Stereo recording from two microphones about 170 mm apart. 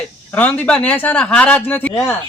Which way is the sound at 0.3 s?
10° left (ahead or behind).